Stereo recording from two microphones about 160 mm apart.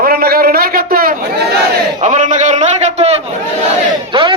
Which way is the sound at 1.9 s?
50° right (ahead or behind).